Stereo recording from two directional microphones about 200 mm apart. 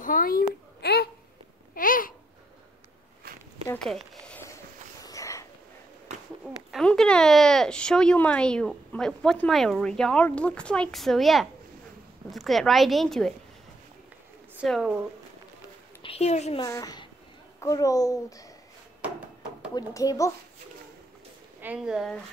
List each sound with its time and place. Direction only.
0.0 s a sound: 45° left (ahead or behind)
1.8 s babbling: 45° left (ahead or behind)
3.2 s walk: 50° right (ahead or behind)
3.6 s speech: 5° left (ahead or behind)
5.0 s a sound: 15° left (ahead or behind)
6.4 s speech: centre (ahead or behind)
14.6 s speech: 5° right (ahead or behind)
16.0 s a woman's voice: 30° left (ahead or behind)
16.6 s a woman's voice: 15° left (ahead or behind)
19.7 s a child's voice: 15° left (ahead or behind)
21.5 s speech: 5° right (ahead or behind)